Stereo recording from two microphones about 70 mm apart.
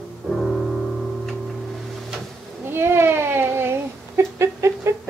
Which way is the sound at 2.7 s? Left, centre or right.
Right.